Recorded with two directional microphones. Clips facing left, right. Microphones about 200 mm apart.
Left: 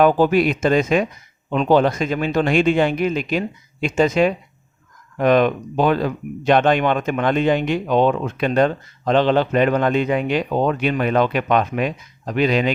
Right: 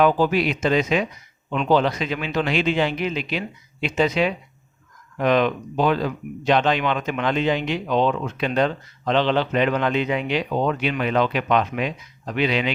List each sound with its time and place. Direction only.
0.0 s speech: 50° left (ahead or behind)